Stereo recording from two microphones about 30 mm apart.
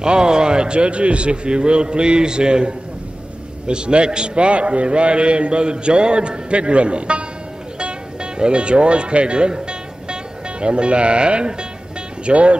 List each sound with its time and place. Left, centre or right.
0.0 s a man's voice: right
4.5 s a man's voice: right
7.8 s music: right
10.6 s a man's voice: right